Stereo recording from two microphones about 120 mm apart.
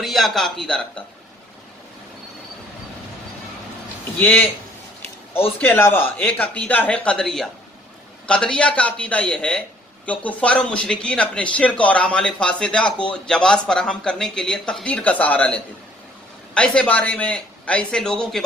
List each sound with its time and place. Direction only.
0.0 s a man's voice: centre (ahead or behind)
4.2 s speech: 15° left (ahead or behind)
5.6 s speech: 20° left (ahead or behind)